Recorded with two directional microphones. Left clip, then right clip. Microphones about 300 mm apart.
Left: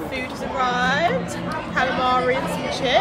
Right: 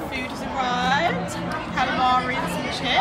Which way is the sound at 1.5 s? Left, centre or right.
Centre.